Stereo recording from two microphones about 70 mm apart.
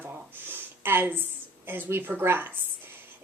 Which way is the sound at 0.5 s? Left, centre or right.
Right.